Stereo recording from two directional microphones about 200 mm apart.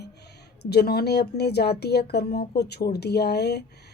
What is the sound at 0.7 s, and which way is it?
A woman's voice, 50° left (ahead or behind).